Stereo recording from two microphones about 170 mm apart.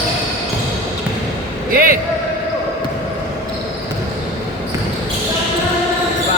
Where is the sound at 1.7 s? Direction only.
60° right (ahead or behind).